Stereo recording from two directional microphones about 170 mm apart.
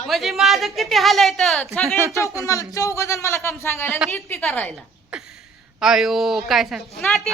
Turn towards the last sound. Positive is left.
turn(degrees=0)  # may be behind; listen again after turning